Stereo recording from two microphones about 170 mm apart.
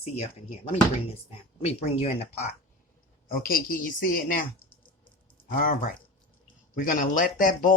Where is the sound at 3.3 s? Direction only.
60° left (ahead or behind).